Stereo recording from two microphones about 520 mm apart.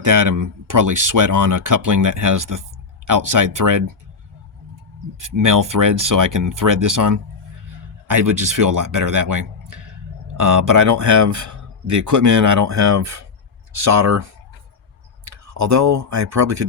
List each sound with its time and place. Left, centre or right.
0.0 s speech: right
5.2 s speech: right
15.5 s speech: right